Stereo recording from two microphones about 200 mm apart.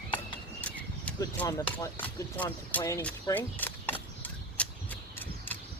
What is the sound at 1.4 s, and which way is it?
Speech, 15° left (ahead or behind).